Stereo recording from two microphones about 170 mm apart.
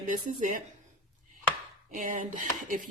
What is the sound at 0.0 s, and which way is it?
Speech, 50° right (ahead or behind).